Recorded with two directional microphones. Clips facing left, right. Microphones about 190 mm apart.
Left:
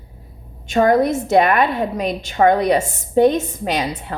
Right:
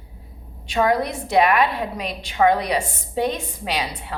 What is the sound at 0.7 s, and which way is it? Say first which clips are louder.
A woman's voice: left 6 dB; 45° left (ahead or behind).